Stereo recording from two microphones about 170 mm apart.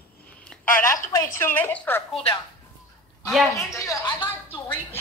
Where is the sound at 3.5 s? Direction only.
20° left (ahead or behind).